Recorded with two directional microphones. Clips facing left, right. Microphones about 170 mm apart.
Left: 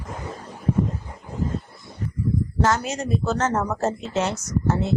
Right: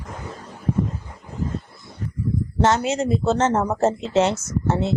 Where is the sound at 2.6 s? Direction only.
25° right (ahead or behind).